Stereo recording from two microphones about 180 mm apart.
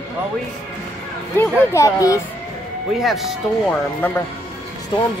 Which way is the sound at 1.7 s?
15° left (ahead or behind).